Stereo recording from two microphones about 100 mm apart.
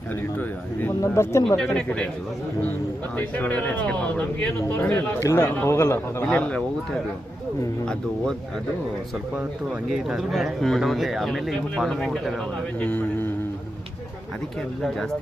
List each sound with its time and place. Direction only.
0.2 s a sound: 20° left (ahead or behind)
1.5 s speech: 5° left (ahead or behind)
3.2 s speech: 15° left (ahead or behind)
5.2 s a man's voice: 25° left (ahead or behind)
6.3 s speech: 15° left (ahead or behind)
9.9 s speech: 5° right (ahead or behind)
12.8 s speech: 15° left (ahead or behind)